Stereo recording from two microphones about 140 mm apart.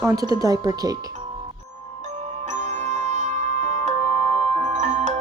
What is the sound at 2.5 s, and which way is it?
Music, 60° right (ahead or behind).